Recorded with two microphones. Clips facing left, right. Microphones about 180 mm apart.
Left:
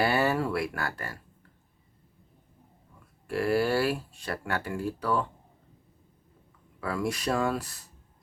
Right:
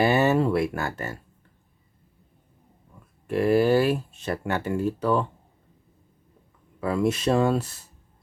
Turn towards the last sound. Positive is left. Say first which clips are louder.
# right 6 dB
turn(degrees=-25)  # may be behind; listen again after turning